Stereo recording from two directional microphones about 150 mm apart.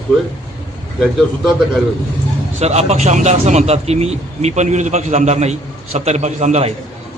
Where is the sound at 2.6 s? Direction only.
45° right (ahead or behind).